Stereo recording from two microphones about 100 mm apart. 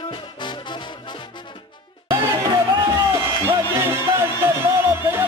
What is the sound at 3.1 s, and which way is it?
Music, 30° right (ahead or behind).